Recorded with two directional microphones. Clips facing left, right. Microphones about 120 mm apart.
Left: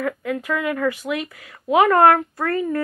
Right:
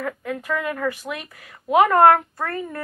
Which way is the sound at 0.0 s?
30° right (ahead or behind).